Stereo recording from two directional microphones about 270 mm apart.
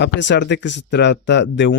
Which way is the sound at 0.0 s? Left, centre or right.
Left.